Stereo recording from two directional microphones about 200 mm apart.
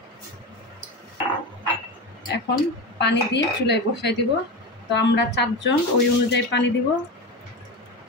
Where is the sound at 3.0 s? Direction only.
60° left (ahead or behind).